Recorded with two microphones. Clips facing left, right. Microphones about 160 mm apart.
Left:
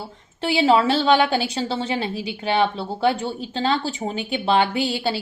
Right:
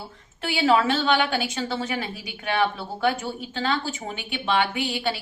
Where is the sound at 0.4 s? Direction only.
30° left (ahead or behind).